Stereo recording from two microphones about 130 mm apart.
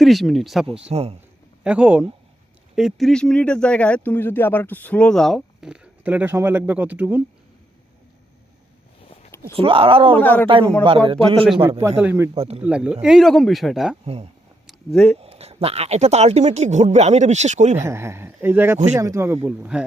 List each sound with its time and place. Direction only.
0.0 s speech: centre (ahead or behind)
0.9 s speech: 50° right (ahead or behind)
1.6 s speech: 10° right (ahead or behind)
9.6 s speech: 45° right (ahead or behind)
10.2 s a man's voice: 15° left (ahead or behind)
10.8 s speech: 45° right (ahead or behind)
11.8 s speech: 15° right (ahead or behind)
12.3 s speech: 50° right (ahead or behind)
12.6 s speech: 10° right (ahead or behind)
14.0 s speech: 50° right (ahead or behind)
14.7 s speech: 5° left (ahead or behind)
15.2 s speech: 50° right (ahead or behind)
17.7 s speech: 20° right (ahead or behind)
19.5 s speech: 10° right (ahead or behind)